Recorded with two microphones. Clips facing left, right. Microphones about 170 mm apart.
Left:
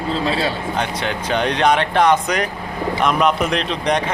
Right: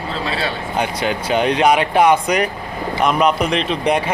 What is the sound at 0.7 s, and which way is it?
A man's voice, 10° right (ahead or behind).